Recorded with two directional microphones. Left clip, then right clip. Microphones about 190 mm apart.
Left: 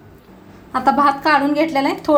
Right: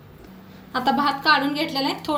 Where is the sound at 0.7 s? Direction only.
30° left (ahead or behind).